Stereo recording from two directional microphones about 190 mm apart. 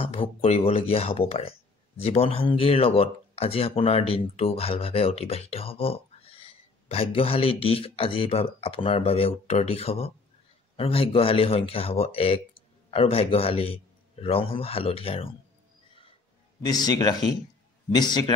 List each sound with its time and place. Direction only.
0.0 s speech: 30° left (ahead or behind)
15.9 s music: 30° left (ahead or behind)
16.6 s speech: 20° left (ahead or behind)